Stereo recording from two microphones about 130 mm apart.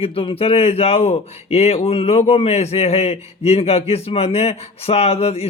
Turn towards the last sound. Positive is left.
turn(degrees=50)  # may be behind; listen again after turning